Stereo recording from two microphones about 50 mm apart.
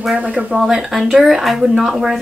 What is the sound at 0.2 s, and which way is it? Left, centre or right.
Speech, right.